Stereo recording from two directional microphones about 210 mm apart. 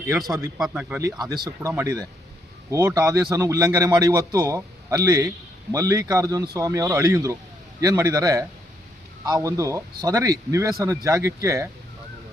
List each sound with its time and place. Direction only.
0.3 s a man's voice: 15° right (ahead or behind)